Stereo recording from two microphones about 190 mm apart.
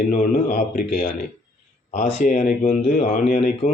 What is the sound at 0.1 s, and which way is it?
Speech, 45° left (ahead or behind).